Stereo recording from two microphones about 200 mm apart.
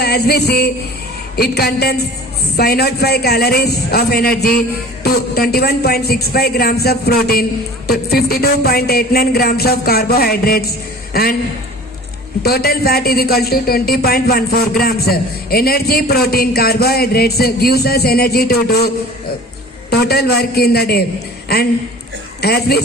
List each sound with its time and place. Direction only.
0.0 s a sound: 55° left (ahead or behind)
1.4 s a man's voice: 50° left (ahead or behind)
12.4 s a man's voice: 50° left (ahead or behind)
19.9 s a man's voice: 50° left (ahead or behind)